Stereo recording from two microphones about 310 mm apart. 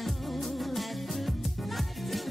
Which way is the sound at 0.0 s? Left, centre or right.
Centre.